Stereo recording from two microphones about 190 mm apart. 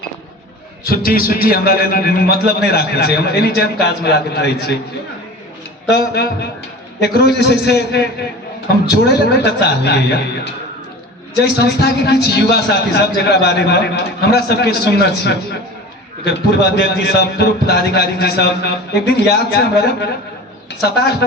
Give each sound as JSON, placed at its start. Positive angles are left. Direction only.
{"t": 0.9, "sound": "a man's voice", "side_deg": 50}
{"t": 5.9, "sound": "a man's voice", "side_deg": 60}